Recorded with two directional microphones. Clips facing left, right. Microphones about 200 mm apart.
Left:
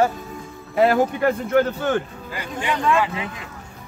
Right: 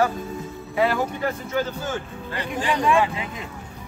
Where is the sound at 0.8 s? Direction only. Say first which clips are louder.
Left 5 dB; 45° left (ahead or behind).